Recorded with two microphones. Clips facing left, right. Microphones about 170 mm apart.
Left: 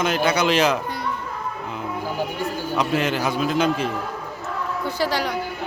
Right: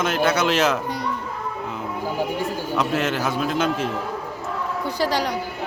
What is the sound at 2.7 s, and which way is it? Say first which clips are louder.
Speech: left 1 dB; centre (ahead or behind).